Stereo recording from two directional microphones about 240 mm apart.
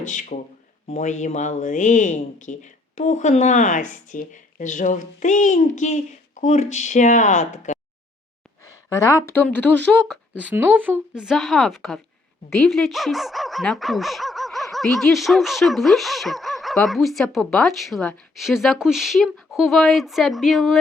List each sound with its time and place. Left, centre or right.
0.0 s speech: left
8.9 s a woman's voice: centre
10.4 s speech: centre